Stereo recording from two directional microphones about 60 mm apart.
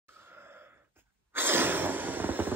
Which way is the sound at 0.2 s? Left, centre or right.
Right.